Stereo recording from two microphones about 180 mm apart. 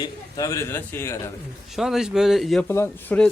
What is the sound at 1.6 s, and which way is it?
A man's voice, centre (ahead or behind).